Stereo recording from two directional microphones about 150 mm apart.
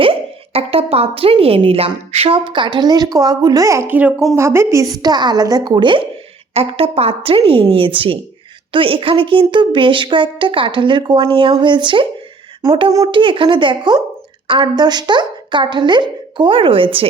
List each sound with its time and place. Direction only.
0.0 s a woman's voice: 40° right (ahead or behind)